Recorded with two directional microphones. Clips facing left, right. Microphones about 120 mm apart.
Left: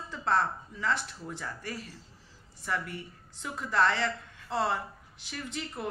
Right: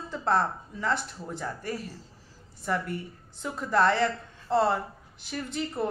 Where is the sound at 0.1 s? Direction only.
30° right (ahead or behind).